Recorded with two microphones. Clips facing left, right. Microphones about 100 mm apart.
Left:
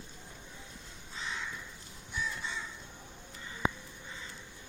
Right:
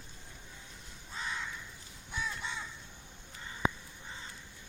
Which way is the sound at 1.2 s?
45° right (ahead or behind).